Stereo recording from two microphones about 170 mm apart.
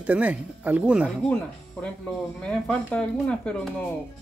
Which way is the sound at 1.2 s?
5° left (ahead or behind).